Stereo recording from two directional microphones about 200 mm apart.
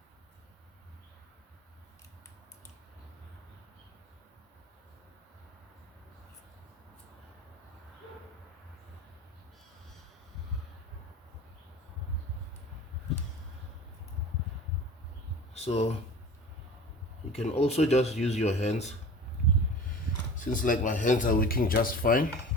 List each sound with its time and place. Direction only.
15.5 s speech: 30° left (ahead or behind)
17.3 s speech: 30° left (ahead or behind)
20.4 s speech: 40° left (ahead or behind)